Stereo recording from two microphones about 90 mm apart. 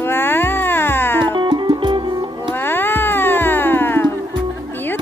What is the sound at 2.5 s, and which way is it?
Music, 25° left (ahead or behind).